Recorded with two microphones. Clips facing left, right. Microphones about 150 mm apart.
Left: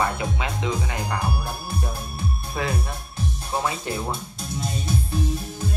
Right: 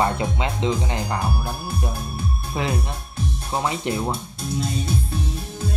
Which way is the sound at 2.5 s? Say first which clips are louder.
Right 2 dB; 20° right (ahead or behind).